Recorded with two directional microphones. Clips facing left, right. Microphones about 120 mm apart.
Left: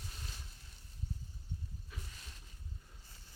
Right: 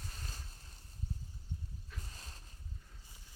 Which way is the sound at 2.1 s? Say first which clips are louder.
Right 2 dB; 35° right (ahead or behind).